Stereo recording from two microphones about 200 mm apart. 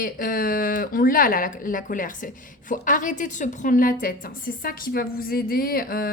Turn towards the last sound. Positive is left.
turn(degrees=50)  # may be behind; listen again after turning